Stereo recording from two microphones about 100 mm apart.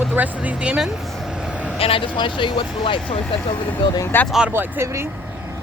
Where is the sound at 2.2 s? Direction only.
55° left (ahead or behind).